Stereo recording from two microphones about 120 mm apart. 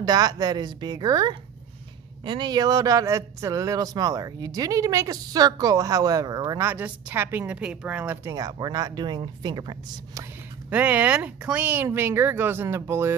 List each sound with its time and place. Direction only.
0.0 s speech: 30° right (ahead or behind)
6.6 s speech: 15° right (ahead or behind)
8.3 s speech: 30° right (ahead or behind)
10.7 s speech: 10° right (ahead or behind)